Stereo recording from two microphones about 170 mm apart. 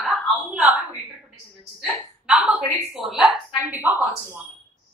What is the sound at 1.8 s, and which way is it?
A woman's voice, 5° right (ahead or behind).